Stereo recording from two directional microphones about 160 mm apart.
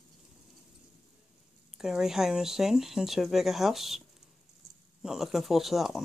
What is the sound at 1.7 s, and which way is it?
Speech, 5° right (ahead or behind).